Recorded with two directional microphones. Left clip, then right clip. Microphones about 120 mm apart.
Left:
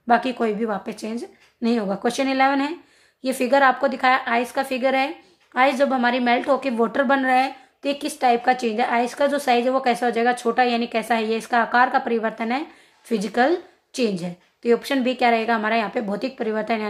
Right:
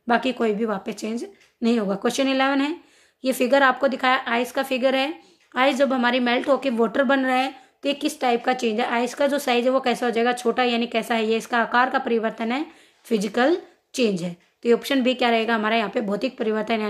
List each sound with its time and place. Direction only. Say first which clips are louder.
0.0 s a woman's voice: left 2 dB; 35° right (ahead or behind)